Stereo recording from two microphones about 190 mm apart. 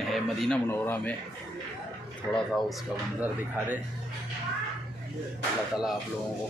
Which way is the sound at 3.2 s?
10° right (ahead or behind).